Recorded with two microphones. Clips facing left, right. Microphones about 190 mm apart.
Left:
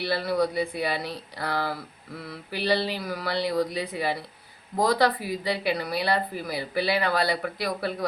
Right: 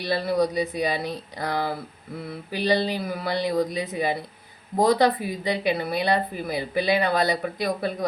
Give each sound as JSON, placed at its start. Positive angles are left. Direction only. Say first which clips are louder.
{"t": 0.0, "sound": "speech", "louder": "right 2 dB", "side_deg": -20}